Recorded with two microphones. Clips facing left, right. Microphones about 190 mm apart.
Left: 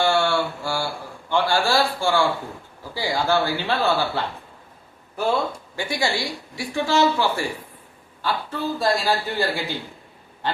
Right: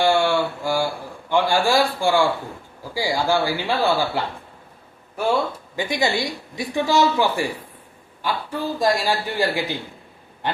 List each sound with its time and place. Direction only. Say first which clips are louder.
0.0 s a sound: right 2 dB; 15° right (ahead or behind)
1.3 s a man's voice: right 2 dB; 15° right (ahead or behind)
5.7 s speech: right 4 dB; 20° right (ahead or behind)